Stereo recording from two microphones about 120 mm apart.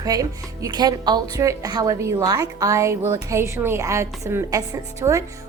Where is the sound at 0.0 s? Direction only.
30° right (ahead or behind).